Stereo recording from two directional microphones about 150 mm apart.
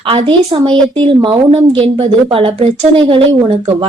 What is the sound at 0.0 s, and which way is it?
A woman's voice, 35° right (ahead or behind).